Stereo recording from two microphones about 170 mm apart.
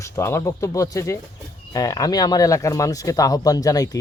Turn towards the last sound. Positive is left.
turn(degrees=20)  # may be behind; listen again after turning